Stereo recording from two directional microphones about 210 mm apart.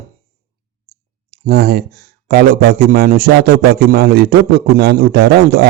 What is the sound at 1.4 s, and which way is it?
Speech, 50° right (ahead or behind).